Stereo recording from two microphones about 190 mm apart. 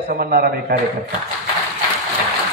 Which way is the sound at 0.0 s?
50° right (ahead or behind).